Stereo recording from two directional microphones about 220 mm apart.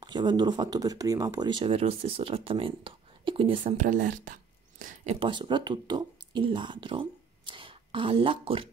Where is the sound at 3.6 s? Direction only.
35° right (ahead or behind).